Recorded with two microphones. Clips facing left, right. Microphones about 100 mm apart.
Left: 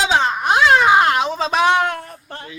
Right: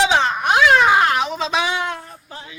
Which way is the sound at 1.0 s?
25° left (ahead or behind).